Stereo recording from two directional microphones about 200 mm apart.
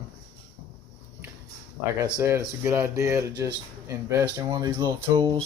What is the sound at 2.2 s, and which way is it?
Speech, 15° right (ahead or behind).